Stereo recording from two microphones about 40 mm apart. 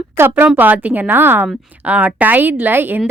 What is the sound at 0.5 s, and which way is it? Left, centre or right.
Speech, right.